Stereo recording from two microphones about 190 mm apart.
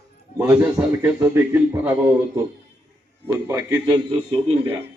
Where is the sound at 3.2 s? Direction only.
10° right (ahead or behind).